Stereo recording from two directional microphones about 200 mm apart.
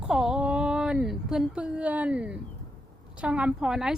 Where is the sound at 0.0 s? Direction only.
5° right (ahead or behind).